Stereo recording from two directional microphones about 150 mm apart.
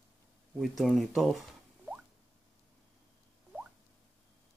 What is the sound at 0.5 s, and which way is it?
Speech, centre (ahead or behind).